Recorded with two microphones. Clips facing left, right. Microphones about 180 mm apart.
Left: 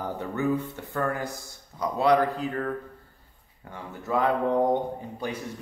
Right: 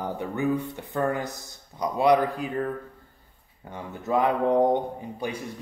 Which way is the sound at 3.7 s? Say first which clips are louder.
Right 2 dB; 20° right (ahead or behind).